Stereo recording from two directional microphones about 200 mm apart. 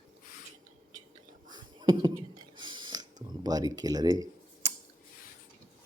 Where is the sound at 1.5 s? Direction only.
20° right (ahead or behind).